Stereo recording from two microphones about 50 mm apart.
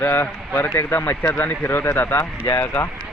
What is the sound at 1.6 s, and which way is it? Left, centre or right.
Speech, left.